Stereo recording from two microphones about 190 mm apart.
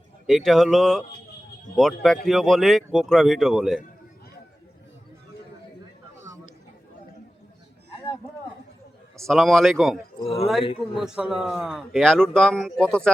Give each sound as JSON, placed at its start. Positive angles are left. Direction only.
{"t": 0.3, "sound": "speech", "side_deg": 0}
{"t": 9.2, "sound": "speech", "side_deg": 0}
{"t": 10.2, "sound": "speech", "side_deg": 30}
{"t": 10.9, "sound": "speech", "side_deg": -5}